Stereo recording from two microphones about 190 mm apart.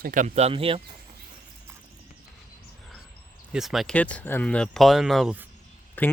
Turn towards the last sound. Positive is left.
turn(degrees=10)  # may be behind; listen again after turning